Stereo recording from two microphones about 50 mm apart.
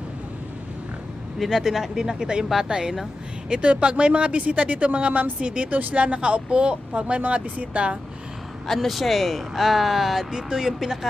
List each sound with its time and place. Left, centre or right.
1.4 s speech: centre
3.4 s speech: right
5.8 s speech: right
6.0 s speech: right
8.6 s speech: centre